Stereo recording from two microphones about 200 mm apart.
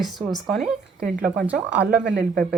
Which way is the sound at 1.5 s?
5° right (ahead or behind).